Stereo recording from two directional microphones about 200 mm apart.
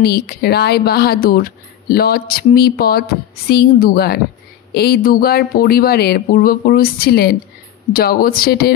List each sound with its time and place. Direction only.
0.0 s speech: 50° left (ahead or behind)